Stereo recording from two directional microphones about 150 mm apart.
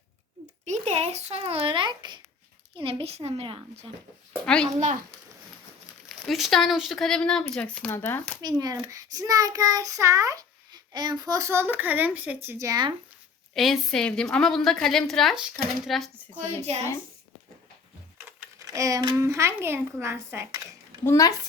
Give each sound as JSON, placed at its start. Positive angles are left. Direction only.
{"t": 0.6, "sound": "a child's voice", "side_deg": -50}
{"t": 4.4, "sound": "a woman's voice", "side_deg": 5}
{"t": 6.1, "sound": "a woman's voice", "side_deg": 0}
{"t": 7.9, "sound": "speech", "side_deg": 15}
{"t": 8.4, "sound": "a child's voice", "side_deg": -25}
{"t": 13.5, "sound": "a woman's voice", "side_deg": 0}
{"t": 16.7, "sound": "a woman's voice", "side_deg": -45}
{"t": 18.7, "sound": "a child's voice", "side_deg": -20}
{"t": 21.0, "sound": "a woman's voice", "side_deg": 20}